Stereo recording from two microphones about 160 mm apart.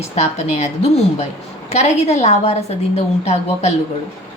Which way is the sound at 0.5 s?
40° left (ahead or behind).